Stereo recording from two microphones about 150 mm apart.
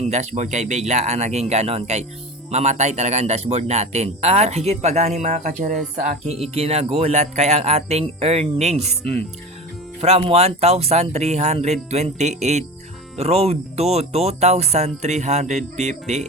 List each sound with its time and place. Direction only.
0.0 s speech: 50° right (ahead or behind)
6.2 s speech: 45° right (ahead or behind)